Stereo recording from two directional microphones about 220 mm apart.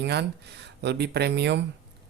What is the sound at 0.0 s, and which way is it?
Speech, 50° right (ahead or behind).